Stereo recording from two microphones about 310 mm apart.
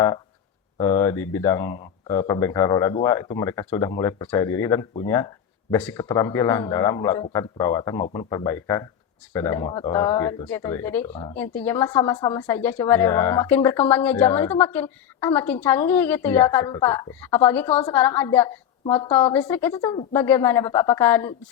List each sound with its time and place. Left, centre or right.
0.8 s a woman's voice: centre
17.7 s a woman's voice: centre
17.9 s speech: centre
19.3 s speech: centre